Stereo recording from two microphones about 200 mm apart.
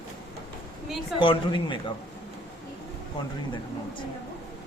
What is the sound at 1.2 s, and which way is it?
Speech, 25° left (ahead or behind).